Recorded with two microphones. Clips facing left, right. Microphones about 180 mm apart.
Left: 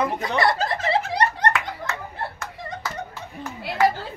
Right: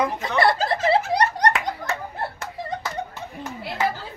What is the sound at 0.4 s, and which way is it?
Snicker, 30° right (ahead or behind).